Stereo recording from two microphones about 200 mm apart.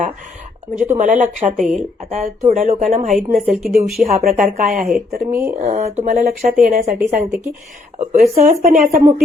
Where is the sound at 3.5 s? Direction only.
Centre (ahead or behind).